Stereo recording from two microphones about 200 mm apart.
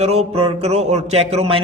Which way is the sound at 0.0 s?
30° right (ahead or behind).